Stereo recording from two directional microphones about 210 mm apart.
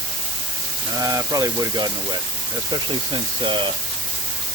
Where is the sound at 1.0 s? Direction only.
15° right (ahead or behind).